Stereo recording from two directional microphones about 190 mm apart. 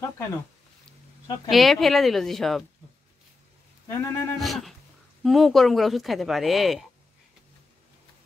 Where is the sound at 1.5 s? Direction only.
Centre (ahead or behind).